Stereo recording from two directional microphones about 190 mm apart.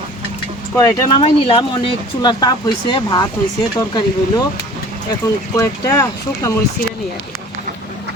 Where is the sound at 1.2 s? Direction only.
30° left (ahead or behind).